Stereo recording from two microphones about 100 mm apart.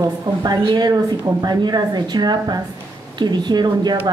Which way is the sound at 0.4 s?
45° right (ahead or behind).